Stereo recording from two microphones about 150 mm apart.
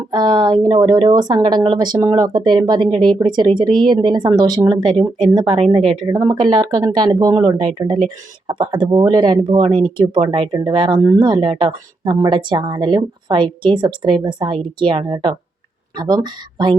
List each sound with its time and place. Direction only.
0.1 s speech: 30° right (ahead or behind)